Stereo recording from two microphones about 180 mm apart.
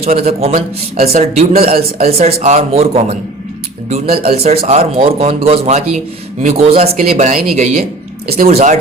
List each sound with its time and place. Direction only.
0.0 s speech: 35° right (ahead or behind)